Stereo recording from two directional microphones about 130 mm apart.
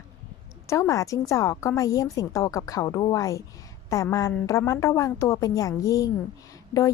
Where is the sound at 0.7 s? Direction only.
25° left (ahead or behind).